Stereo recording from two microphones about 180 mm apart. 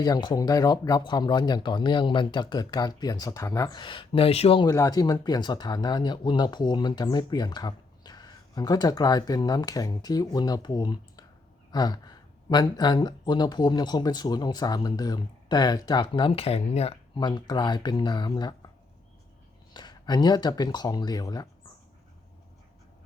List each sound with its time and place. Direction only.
0.0 s speech: 25° left (ahead or behind)
4.7 s speech: 20° left (ahead or behind); by 17.2 s 35° left (ahead or behind)
17.2 s speech: 25° left (ahead or behind)
19.7 s speech: 25° left (ahead or behind)